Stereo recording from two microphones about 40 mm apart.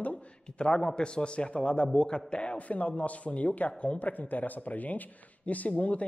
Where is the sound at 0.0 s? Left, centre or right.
Left.